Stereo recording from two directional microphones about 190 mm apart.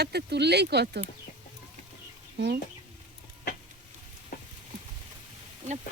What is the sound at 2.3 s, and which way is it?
Speech, 60° right (ahead or behind).